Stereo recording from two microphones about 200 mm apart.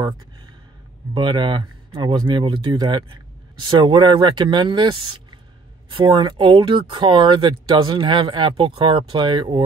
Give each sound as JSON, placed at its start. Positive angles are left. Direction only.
{"t": 1.1, "sound": "speech", "side_deg": -25}
{"t": 5.9, "sound": "speech", "side_deg": -25}